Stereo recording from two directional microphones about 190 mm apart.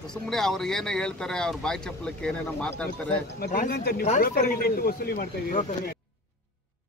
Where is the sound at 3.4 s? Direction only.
50° left (ahead or behind).